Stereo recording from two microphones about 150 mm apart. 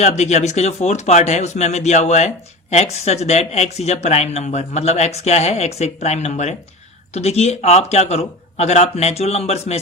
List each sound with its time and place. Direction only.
0.0 s speech: 50° left (ahead or behind)